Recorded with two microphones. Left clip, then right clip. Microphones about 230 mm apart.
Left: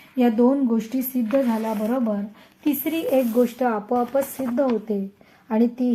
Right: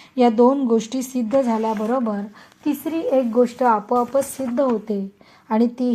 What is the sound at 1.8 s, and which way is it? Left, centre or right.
Speech, centre.